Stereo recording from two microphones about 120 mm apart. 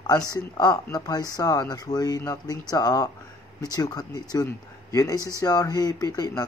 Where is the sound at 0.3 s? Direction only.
35° left (ahead or behind).